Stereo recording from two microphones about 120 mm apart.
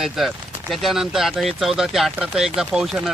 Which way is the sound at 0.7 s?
Centre (ahead or behind).